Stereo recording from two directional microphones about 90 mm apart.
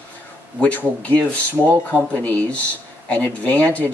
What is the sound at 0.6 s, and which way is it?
Speech, 15° left (ahead or behind).